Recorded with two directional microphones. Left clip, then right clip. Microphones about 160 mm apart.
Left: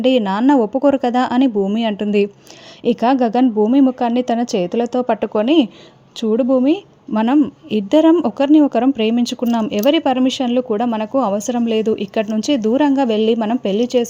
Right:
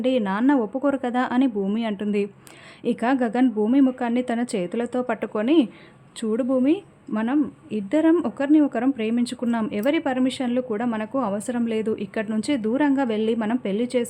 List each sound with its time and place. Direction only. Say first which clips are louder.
0.0 s a woman's voice: left 7 dB; 30° left (ahead or behind)